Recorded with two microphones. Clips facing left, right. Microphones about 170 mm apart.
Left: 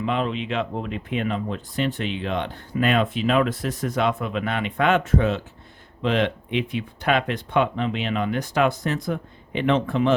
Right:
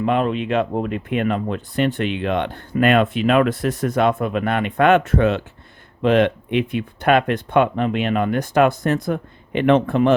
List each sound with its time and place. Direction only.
0.0 s speech: 50° right (ahead or behind)
6.0 s speech: 55° right (ahead or behind)